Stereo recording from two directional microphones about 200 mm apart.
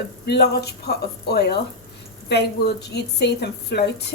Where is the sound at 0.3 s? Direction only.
55° left (ahead or behind).